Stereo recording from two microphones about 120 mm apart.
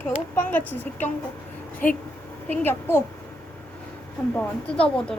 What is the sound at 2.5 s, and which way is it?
Speech, 20° left (ahead or behind).